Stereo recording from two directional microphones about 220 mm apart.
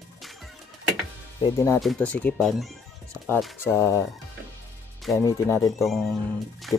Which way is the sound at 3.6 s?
10° left (ahead or behind).